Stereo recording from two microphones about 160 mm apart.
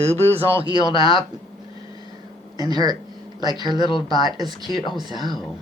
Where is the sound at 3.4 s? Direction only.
25° right (ahead or behind).